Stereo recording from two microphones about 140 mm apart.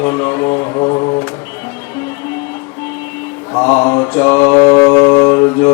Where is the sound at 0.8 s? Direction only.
30° left (ahead or behind).